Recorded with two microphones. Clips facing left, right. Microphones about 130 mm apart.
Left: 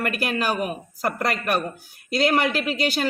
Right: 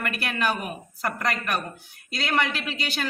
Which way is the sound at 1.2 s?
35° left (ahead or behind).